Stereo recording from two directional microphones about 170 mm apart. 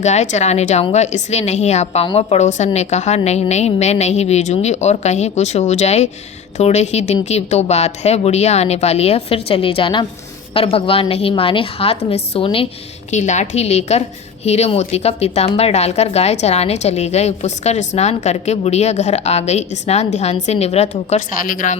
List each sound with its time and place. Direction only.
0.0 s a woman's voice: 40° left (ahead or behind)
13.1 s a woman's voice: 45° left (ahead or behind)